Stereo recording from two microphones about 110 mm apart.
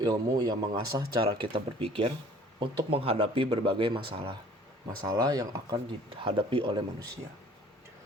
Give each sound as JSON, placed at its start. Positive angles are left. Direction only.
{"t": 0.0, "sound": "speech", "side_deg": -40}
{"t": 5.0, "sound": "speech", "side_deg": -35}
{"t": 6.2, "sound": "speech", "side_deg": -50}